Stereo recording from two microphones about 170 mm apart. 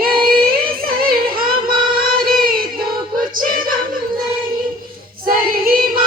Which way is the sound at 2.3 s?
60° right (ahead or behind).